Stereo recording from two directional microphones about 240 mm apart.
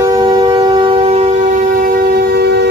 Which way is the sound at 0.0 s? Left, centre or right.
Centre.